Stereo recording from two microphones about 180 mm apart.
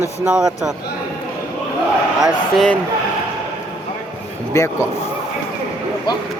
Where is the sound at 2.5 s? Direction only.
Centre (ahead or behind).